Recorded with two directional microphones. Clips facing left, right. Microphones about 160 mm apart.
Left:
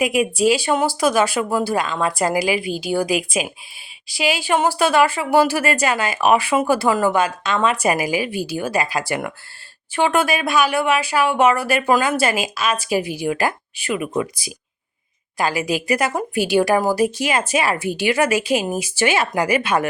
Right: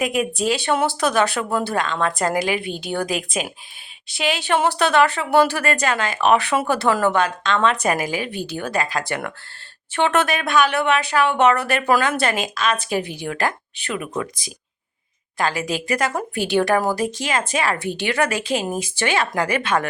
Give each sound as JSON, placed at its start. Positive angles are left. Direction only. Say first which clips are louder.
{"t": 0.0, "sound": "speech", "louder": "left 4 dB", "side_deg": 5}